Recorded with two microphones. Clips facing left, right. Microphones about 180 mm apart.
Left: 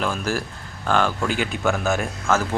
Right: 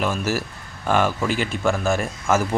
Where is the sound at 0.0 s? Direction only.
5° right (ahead or behind).